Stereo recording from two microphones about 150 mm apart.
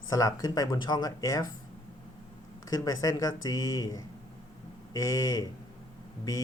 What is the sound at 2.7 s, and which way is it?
Speech, 25° left (ahead or behind).